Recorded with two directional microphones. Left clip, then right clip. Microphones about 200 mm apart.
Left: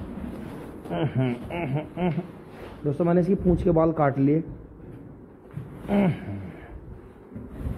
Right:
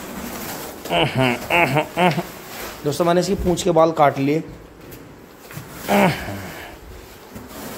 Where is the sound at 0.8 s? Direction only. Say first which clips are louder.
Right 10 dB; 15° right (ahead or behind).